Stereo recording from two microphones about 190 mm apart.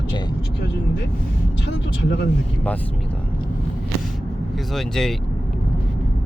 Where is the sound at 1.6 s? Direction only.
65° left (ahead or behind).